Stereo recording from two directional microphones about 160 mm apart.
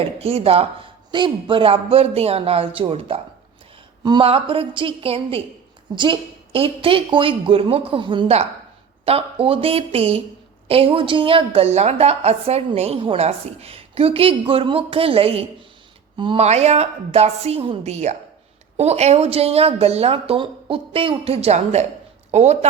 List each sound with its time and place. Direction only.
0.0 s a woman's voice: 40° right (ahead or behind)